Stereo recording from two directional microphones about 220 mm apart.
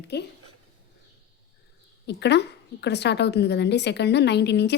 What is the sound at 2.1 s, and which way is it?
A woman's voice, 50° left (ahead or behind).